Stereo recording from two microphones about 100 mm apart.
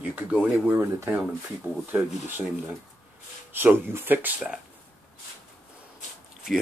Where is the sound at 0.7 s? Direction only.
25° right (ahead or behind).